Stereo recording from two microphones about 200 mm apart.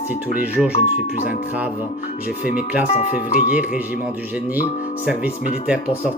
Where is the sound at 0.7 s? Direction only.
35° left (ahead or behind).